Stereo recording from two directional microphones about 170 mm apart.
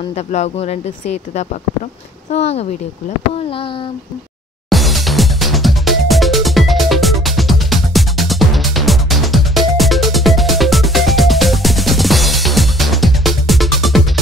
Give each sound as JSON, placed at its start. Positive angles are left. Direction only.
{"t": 0.1, "sound": "speech", "side_deg": 40}
{"t": 4.6, "sound": "music", "side_deg": 0}